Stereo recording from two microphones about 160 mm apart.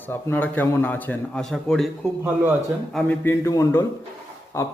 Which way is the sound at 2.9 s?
15° left (ahead or behind).